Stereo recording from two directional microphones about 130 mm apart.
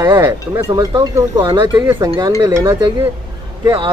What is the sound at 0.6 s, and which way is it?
Speech, 30° right (ahead or behind).